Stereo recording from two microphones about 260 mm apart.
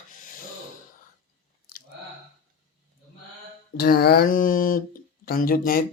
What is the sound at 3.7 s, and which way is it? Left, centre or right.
Speech, left.